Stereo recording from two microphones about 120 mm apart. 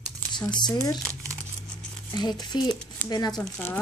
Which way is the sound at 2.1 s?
35° left (ahead or behind).